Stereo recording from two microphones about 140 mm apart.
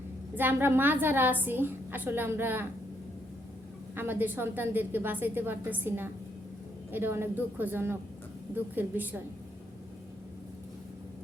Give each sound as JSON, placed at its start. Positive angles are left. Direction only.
{"t": 0.3, "sound": "a woman's voice", "side_deg": -15}
{"t": 3.9, "sound": "a woman's voice", "side_deg": -15}